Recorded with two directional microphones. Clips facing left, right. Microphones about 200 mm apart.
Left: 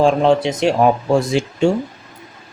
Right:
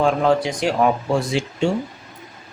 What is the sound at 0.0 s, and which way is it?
Speech, 25° left (ahead or behind).